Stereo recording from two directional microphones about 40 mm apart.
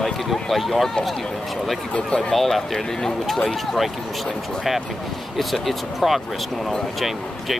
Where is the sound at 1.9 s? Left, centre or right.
Left.